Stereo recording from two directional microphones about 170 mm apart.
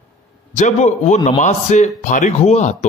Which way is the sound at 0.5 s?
45° left (ahead or behind).